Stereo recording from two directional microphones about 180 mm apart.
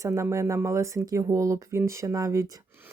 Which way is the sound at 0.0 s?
15° right (ahead or behind).